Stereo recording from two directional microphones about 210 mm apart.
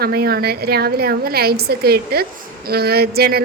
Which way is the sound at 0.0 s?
45° right (ahead or behind).